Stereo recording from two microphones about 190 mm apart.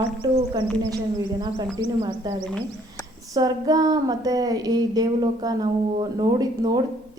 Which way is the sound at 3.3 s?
20° right (ahead or behind).